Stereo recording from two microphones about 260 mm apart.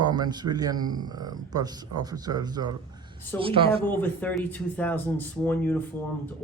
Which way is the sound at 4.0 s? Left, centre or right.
Centre.